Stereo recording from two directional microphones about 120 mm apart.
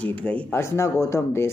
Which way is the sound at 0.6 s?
25° left (ahead or behind).